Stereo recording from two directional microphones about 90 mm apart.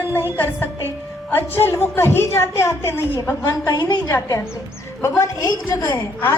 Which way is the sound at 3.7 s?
45° left (ahead or behind).